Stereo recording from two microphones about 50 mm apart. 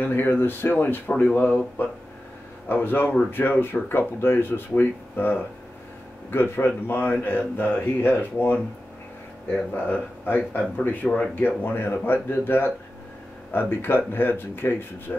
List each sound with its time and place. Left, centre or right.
0.1 s speech: left
2.7 s speech: left
9.8 s speech: left